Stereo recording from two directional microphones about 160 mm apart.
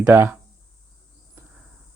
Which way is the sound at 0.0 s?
15° right (ahead or behind).